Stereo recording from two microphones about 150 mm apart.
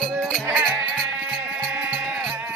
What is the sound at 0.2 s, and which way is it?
Music, centre (ahead or behind).